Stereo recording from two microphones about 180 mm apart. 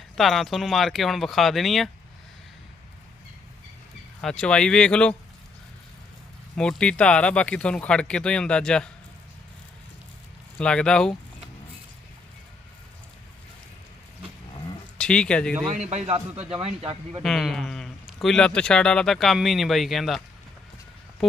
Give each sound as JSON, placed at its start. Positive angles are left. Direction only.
{"t": 0.2, "sound": "a man's voice", "side_deg": 0}
{"t": 4.2, "sound": "a man's voice", "side_deg": 5}
{"t": 6.6, "sound": "a man's voice", "side_deg": 5}
{"t": 10.6, "sound": "a man's voice", "side_deg": 5}
{"t": 14.9, "sound": "speech", "side_deg": 5}
{"t": 15.8, "sound": "speech", "side_deg": -40}
{"t": 17.2, "sound": "a man's voice", "side_deg": 5}